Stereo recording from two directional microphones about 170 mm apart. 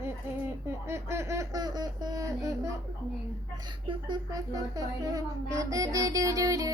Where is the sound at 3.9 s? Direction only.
25° right (ahead or behind).